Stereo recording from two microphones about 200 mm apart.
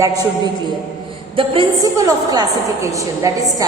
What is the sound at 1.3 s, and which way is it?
A woman's voice, 25° right (ahead or behind).